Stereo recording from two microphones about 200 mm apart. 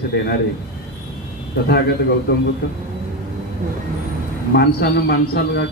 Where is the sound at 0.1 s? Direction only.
55° left (ahead or behind).